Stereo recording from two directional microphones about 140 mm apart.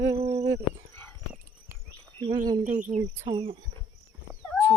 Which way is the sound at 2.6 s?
60° right (ahead or behind).